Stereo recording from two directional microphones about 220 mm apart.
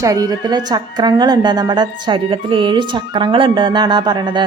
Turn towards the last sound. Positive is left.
turn(degrees=-20)  # may be behind; listen again after turning